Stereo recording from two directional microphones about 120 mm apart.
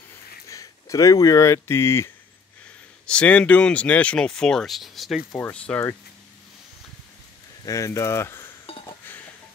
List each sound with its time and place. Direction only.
0.5 s speech: 25° left (ahead or behind)
3.1 s speech: 10° left (ahead or behind)
5.4 s speech: 10° left (ahead or behind)
7.6 s speech: 25° left (ahead or behind)